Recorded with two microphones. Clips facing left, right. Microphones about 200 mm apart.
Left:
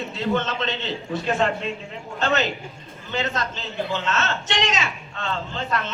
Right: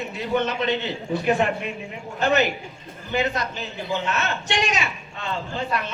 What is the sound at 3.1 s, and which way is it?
A man's voice, 15° right (ahead or behind).